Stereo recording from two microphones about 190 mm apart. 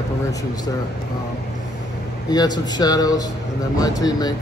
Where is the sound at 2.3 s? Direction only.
20° left (ahead or behind).